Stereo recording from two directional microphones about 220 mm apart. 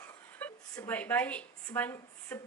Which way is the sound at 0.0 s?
10° left (ahead or behind).